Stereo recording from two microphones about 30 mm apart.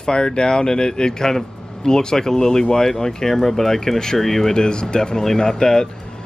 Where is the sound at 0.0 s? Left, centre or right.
Left; by 4.6 s centre.